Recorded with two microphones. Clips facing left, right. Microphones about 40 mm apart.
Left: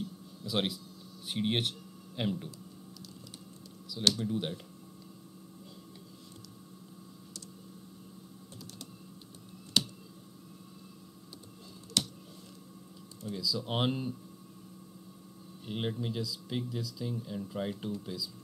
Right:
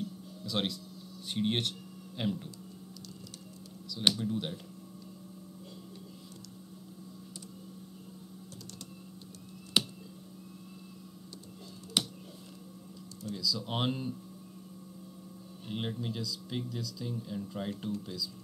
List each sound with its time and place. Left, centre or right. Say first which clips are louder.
0.5 s speech: left 1 dB; centre
4.1 s speech: left 1 dB; centre
9.8 s a sound: right 1 dB; centre
12.0 s finger snapping: right 1 dB; centre
13.3 s speech: left 1 dB; centre
15.6 s speech: left 2 dB; centre